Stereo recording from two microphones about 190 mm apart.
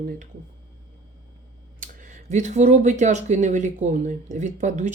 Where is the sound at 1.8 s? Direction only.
45° right (ahead or behind).